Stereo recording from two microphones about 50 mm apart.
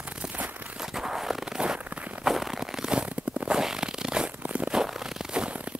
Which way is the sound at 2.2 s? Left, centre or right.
Centre.